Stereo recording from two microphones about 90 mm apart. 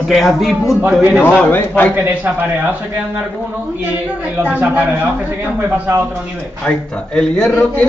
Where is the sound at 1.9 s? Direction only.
25° right (ahead or behind).